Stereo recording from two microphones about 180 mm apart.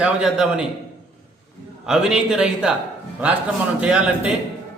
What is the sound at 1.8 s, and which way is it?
Speech, centre (ahead or behind).